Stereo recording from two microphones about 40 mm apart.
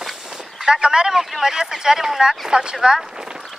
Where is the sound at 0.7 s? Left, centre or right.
Centre.